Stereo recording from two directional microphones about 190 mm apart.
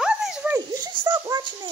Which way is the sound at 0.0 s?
5° right (ahead or behind).